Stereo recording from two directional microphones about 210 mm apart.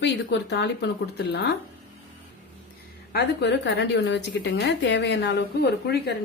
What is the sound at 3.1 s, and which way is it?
A woman's voice, 55° left (ahead or behind).